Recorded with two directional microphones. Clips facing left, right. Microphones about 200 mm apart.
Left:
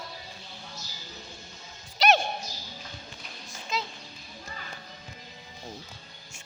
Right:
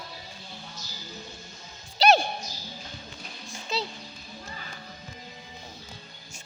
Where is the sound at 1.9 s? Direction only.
35° right (ahead or behind).